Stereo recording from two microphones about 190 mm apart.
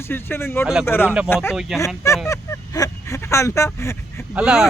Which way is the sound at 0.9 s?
10° left (ahead or behind).